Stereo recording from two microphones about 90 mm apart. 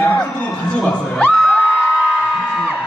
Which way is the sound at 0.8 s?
5° left (ahead or behind).